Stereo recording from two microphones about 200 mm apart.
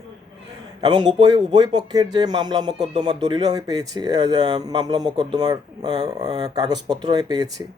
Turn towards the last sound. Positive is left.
turn(degrees=-20)  # may be behind; listen again after turning